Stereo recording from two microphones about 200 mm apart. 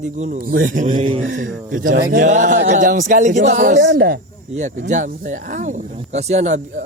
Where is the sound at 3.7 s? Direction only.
55° right (ahead or behind).